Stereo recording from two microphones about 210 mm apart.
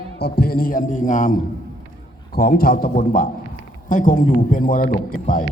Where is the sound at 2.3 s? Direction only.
45° left (ahead or behind).